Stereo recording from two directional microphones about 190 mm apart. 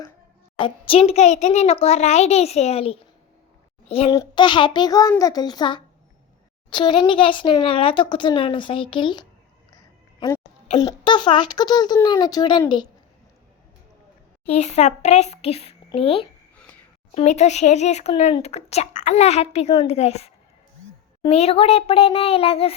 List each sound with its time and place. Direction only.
0.6 s a child's voice: 30° left (ahead or behind)
4.1 s speech: 20° left (ahead or behind)
9.7 s a sound: 20° left (ahead or behind)
10.8 s speech: 25° left (ahead or behind)
14.4 s speech: 35° left (ahead or behind)